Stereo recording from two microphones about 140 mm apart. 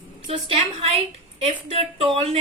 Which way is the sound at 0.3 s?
45° right (ahead or behind).